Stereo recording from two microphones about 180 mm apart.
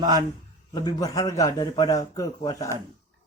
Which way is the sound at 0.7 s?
20° left (ahead or behind).